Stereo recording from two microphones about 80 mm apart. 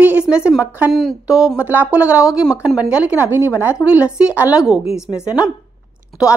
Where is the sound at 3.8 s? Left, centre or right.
Centre.